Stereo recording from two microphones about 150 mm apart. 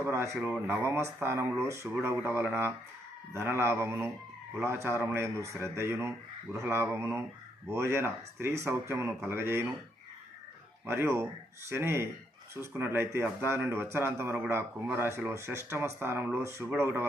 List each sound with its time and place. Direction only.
0.0 s speech: 15° right (ahead or behind)
10.8 s speech: 15° right (ahead or behind)